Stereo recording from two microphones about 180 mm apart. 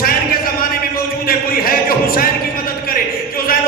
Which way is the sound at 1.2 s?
55° left (ahead or behind).